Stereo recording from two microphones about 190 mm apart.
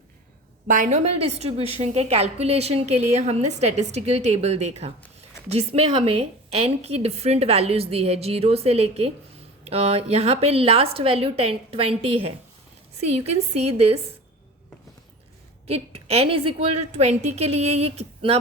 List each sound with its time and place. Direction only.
0.7 s a woman's voice: 40° right (ahead or behind)
15.6 s a woman's voice: 30° right (ahead or behind)